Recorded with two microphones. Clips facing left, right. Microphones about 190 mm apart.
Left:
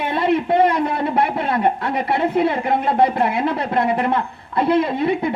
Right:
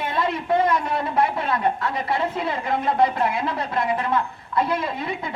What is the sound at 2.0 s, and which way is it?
A woman's voice, 60° left (ahead or behind).